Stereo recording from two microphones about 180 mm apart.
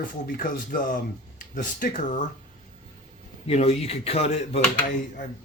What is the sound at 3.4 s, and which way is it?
Speech, 35° left (ahead or behind).